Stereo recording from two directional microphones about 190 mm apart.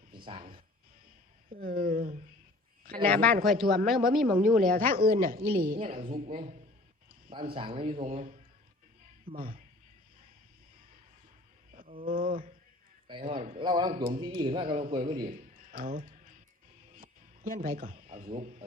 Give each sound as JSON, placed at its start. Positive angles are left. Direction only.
{"t": 1.5, "sound": "a woman's voice", "side_deg": -50}
{"t": 3.0, "sound": "a woman's voice", "side_deg": 5}
{"t": 4.7, "sound": "a woman's voice", "side_deg": -50}
{"t": 9.3, "sound": "a woman's voice", "side_deg": -50}
{"t": 12.0, "sound": "a woman's voice", "side_deg": -50}
{"t": 13.1, "sound": "a man's voice", "side_deg": -25}
{"t": 15.4, "sound": "a sound", "side_deg": -45}
{"t": 17.0, "sound": "music", "side_deg": -50}
{"t": 18.0, "sound": "a sound", "side_deg": -45}
{"t": 18.3, "sound": "speech", "side_deg": -35}